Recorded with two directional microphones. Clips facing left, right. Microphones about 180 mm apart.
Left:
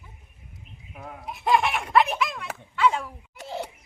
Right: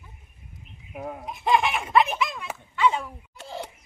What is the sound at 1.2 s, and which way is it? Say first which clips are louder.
Speech: even; centre (ahead or behind).